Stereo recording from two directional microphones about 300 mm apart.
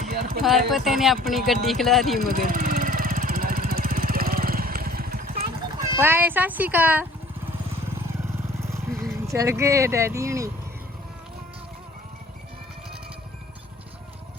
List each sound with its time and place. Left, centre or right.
0.0 s a sound: right
0.4 s speech: centre
2.3 s vehicle: right
5.8 s speech: centre
8.6 s vehicle: centre
9.2 s speech: centre